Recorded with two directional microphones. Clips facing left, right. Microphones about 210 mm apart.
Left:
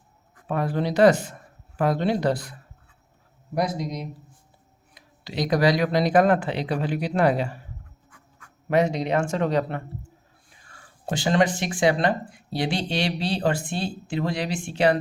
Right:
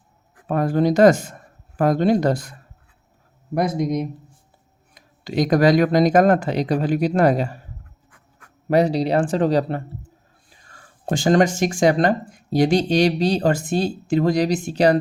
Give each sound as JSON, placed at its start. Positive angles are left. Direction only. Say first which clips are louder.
{"t": 0.4, "sound": "speech", "louder": "right 7 dB", "side_deg": -45}
{"t": 8.7, "sound": "speech", "louder": "right 4 dB", "side_deg": -35}
{"t": 11.0, "sound": "speech", "louder": "right 5 dB", "side_deg": -45}